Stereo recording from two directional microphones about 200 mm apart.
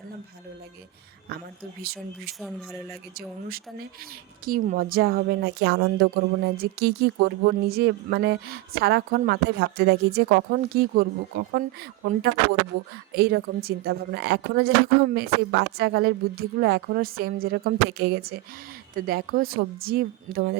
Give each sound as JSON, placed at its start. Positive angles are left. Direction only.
{"t": 1.8, "sound": "a woman's voice", "side_deg": -50}